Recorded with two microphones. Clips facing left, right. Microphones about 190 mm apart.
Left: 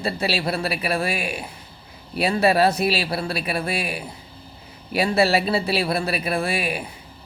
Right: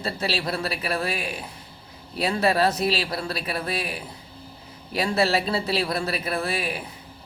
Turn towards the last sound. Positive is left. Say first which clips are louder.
# left 3 dB
turn(degrees=15)  # may be behind; listen again after turning